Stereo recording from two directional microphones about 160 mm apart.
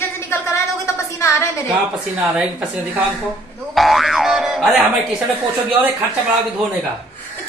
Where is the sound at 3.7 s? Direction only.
Centre (ahead or behind).